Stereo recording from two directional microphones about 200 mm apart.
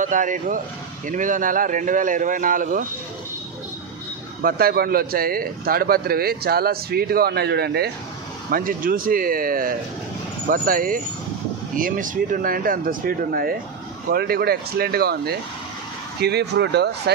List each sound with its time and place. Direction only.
0.0 s speech: 40° right (ahead or behind)
4.4 s speech: 50° right (ahead or behind)